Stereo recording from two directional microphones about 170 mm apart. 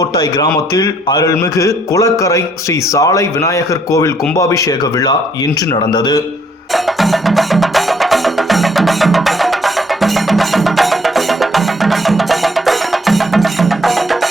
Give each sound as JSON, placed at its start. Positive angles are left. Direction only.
{"t": 0.0, "sound": "a man's voice", "side_deg": 25}
{"t": 6.7, "sound": "music", "side_deg": 0}